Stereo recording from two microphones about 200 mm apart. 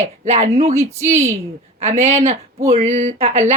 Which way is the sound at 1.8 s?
30° right (ahead or behind).